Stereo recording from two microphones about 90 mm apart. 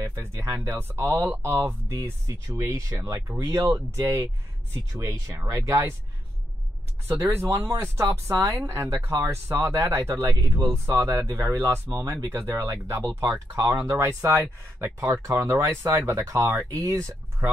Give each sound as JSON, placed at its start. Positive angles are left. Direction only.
{"t": 0.0, "sound": "speech", "side_deg": -30}
{"t": 2.0, "sound": "speech", "side_deg": -40}
{"t": 7.2, "sound": "speech", "side_deg": -25}
{"t": 15.2, "sound": "speech", "side_deg": -35}